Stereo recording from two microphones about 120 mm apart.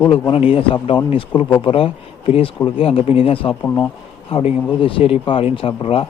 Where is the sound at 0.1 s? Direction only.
50° left (ahead or behind).